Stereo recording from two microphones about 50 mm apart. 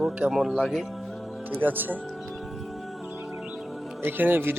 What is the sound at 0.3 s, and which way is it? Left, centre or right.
Speech, centre.